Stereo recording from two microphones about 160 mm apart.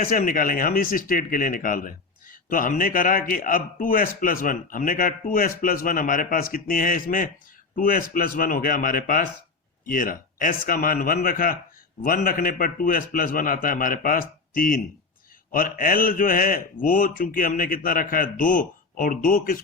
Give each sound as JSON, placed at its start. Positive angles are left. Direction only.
{"t": 0.0, "sound": "a man's voice", "side_deg": 60}